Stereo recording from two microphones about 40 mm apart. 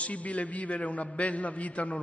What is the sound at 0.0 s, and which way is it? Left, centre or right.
A man's voice, left.